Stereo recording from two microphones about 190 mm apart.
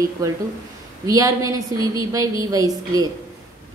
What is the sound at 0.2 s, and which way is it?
A woman's voice, 15° right (ahead or behind).